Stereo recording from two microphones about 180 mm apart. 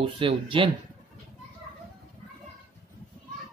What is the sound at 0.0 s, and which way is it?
Speech, 30° right (ahead or behind).